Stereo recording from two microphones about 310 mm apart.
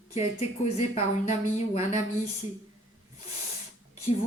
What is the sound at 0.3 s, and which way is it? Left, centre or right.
A woman's voice, left.